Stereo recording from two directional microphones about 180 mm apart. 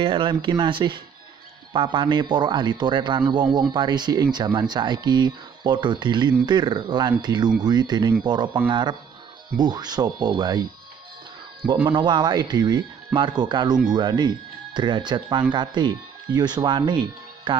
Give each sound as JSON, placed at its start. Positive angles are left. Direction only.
{"t": 0.0, "sound": "speech", "side_deg": -30}